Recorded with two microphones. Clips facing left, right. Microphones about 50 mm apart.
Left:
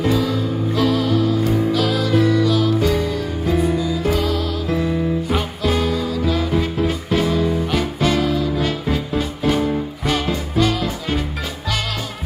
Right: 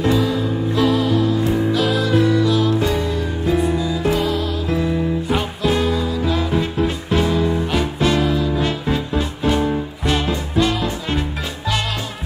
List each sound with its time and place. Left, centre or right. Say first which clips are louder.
0.7 s music: right 1 dB; centre
4.1 s music: right 1 dB; centre